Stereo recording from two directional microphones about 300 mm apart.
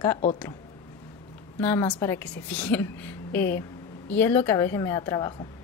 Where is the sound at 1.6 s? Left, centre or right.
Centre.